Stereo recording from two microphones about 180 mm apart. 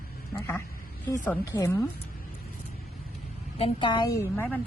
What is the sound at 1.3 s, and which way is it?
Speech, 15° left (ahead or behind).